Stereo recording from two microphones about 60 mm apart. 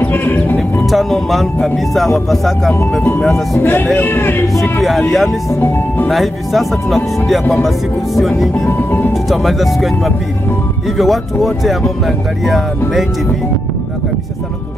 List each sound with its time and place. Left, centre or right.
0.0 s speech: left
0.8 s speech: centre
3.5 s speech: left
4.8 s speech: centre
5.5 s speech: left
6.0 s speech: centre
8.6 s speech: left
9.1 s speech: centre